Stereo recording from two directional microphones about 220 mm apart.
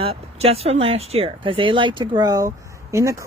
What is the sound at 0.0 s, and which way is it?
A woman's voice, 25° right (ahead or behind).